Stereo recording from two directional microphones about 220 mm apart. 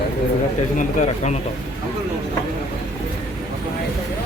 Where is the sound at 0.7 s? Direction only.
35° left (ahead or behind).